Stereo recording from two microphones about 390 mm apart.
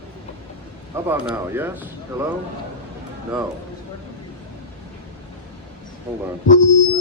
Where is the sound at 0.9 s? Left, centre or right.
Centre.